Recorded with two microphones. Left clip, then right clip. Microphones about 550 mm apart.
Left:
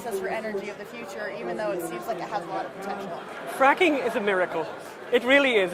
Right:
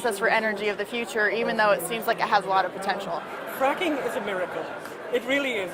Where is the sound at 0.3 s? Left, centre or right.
Right.